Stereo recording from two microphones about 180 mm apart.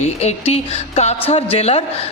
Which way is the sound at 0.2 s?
35° left (ahead or behind).